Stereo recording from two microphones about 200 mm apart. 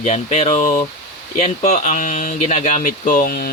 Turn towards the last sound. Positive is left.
turn(degrees=45)  # may be behind; listen again after turning